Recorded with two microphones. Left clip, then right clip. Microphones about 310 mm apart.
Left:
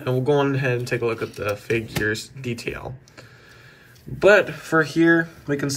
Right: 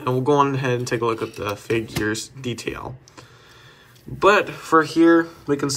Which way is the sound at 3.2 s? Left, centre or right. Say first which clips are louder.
Even; centre.